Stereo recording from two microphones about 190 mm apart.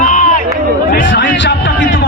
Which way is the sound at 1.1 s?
70° left (ahead or behind).